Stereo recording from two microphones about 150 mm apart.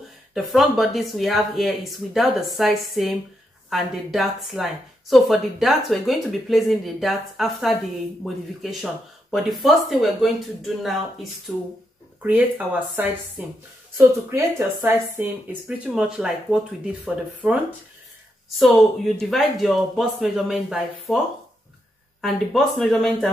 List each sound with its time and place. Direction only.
0.3 s a woman's voice: centre (ahead or behind)
15.9 s a woman's voice: 5° right (ahead or behind)
18.6 s a woman's voice: centre (ahead or behind)
22.2 s a woman's voice: centre (ahead or behind)